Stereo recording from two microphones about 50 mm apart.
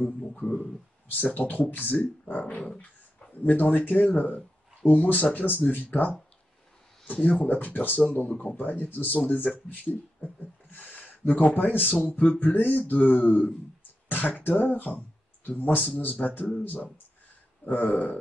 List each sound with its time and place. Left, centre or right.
0.0 s speech: left
7.2 s speech: left